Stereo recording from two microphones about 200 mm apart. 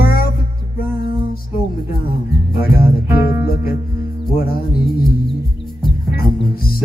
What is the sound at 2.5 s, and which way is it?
Music, 50° left (ahead or behind).